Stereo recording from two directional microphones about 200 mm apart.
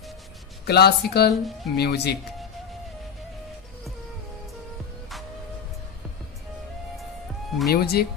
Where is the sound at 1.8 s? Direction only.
55° left (ahead or behind).